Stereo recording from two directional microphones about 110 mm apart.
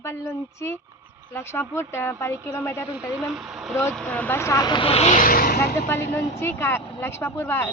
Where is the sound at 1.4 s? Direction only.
20° left (ahead or behind).